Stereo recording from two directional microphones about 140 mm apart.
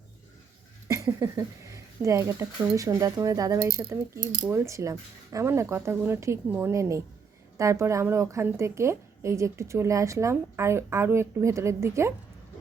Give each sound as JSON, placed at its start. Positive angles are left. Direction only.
{"t": 0.9, "sound": "a woman's voice", "side_deg": -20}
{"t": 4.2, "sound": "speech", "side_deg": -70}
{"t": 4.4, "sound": "a woman's voice", "side_deg": -20}